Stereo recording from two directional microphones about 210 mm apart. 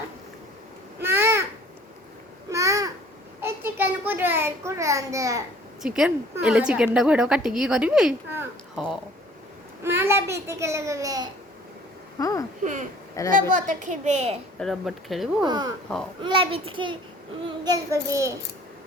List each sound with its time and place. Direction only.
1.0 s babbling: 10° right (ahead or behind)
2.5 s babbling: 15° right (ahead or behind)
3.4 s a child's voice: 10° right (ahead or behind)
5.8 s a woman's voice: 5° right (ahead or behind)
9.8 s a child's voice: 10° right (ahead or behind)
12.2 s speech: 15° left (ahead or behind)
13.5 s speech: 35° right (ahead or behind)
14.6 s a woman's voice: centre (ahead or behind)
15.4 s a child's voice: 20° right (ahead or behind)